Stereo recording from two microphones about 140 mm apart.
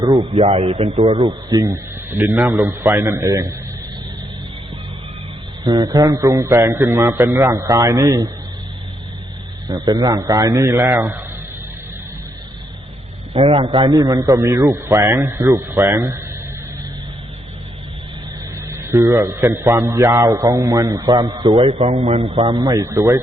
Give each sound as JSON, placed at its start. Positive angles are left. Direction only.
{"t": 0.0, "sound": "a man's voice", "side_deg": -25}
{"t": 0.3, "sound": "speech", "side_deg": -45}
{"t": 1.2, "sound": "a man's voice", "side_deg": -25}
{"t": 5.6, "sound": "a man's voice", "side_deg": -25}
{"t": 9.6, "sound": "a man's voice", "side_deg": -30}
{"t": 13.3, "sound": "a man's voice", "side_deg": -40}
{"t": 13.9, "sound": "a man's voice", "side_deg": -25}
{"t": 18.8, "sound": "a man's voice", "side_deg": -20}
{"t": 21.8, "sound": "speech", "side_deg": -50}
{"t": 22.4, "sound": "a man's voice", "side_deg": -30}